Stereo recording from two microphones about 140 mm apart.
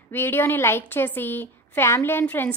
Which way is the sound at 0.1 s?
15° left (ahead or behind).